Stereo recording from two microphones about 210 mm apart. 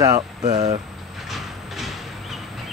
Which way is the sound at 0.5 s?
30° right (ahead or behind).